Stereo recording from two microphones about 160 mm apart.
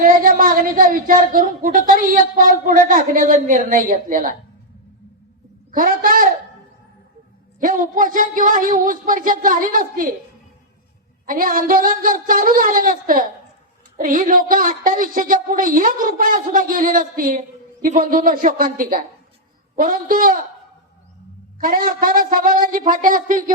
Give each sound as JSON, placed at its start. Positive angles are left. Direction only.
{"t": 0.0, "sound": "speech", "side_deg": -60}
{"t": 5.7, "sound": "speech", "side_deg": -60}
{"t": 7.6, "sound": "speech", "side_deg": -55}
{"t": 11.3, "sound": "speech", "side_deg": -60}
{"t": 21.6, "sound": "speech", "side_deg": -60}